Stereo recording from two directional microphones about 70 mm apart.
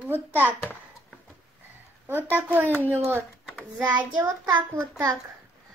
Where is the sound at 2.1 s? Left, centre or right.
Right.